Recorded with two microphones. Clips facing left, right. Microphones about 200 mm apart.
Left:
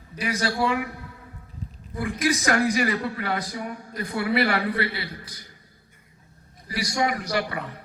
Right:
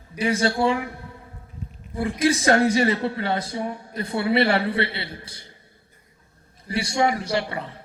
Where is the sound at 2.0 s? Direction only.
25° right (ahead or behind).